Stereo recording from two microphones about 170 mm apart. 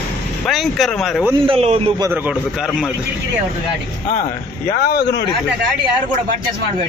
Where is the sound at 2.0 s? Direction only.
15° right (ahead or behind).